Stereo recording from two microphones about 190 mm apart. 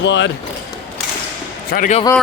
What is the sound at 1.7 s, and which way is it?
Speech, 40° left (ahead or behind).